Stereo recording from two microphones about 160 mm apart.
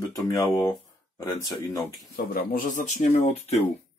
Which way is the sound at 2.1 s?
65° left (ahead or behind).